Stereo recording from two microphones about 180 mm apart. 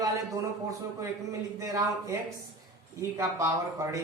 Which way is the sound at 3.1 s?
15° right (ahead or behind).